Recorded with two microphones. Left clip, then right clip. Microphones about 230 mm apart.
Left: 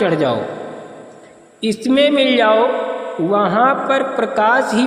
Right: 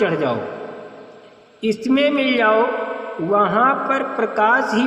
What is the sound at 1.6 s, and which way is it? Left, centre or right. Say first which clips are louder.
A man's voice: left 3 dB; left.